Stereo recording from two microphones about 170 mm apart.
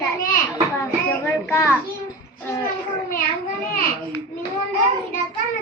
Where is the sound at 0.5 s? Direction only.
10° left (ahead or behind).